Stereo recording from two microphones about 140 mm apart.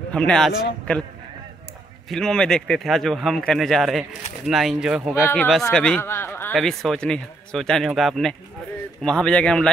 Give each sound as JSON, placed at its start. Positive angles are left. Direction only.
{"t": 0.1, "sound": "a man's voice", "side_deg": 5}
{"t": 2.0, "sound": "speech", "side_deg": 5}
{"t": 5.5, "sound": "a man's voice", "side_deg": 5}
{"t": 6.5, "sound": "a man's voice", "side_deg": 5}